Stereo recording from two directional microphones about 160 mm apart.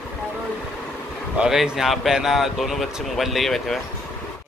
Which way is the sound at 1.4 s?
Centre (ahead or behind).